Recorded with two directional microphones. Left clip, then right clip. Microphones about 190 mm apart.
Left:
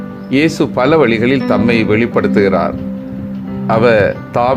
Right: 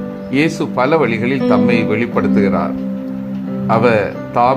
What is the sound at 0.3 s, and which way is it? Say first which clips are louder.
Speech: left 4 dB; 15° left (ahead or behind).